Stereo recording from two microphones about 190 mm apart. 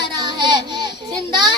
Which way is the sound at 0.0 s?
25° right (ahead or behind).